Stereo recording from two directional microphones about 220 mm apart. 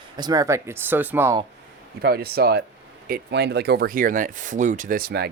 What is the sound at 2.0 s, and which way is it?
Speech, 45° right (ahead or behind).